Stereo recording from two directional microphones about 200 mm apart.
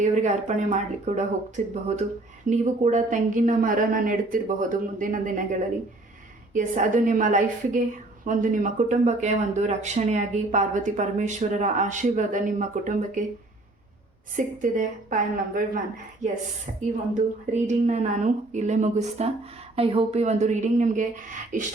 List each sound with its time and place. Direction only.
0.0 s a woman's voice: 35° right (ahead or behind)
14.3 s a woman's voice: 40° right (ahead or behind)
17.2 s a woman's voice: 35° right (ahead or behind)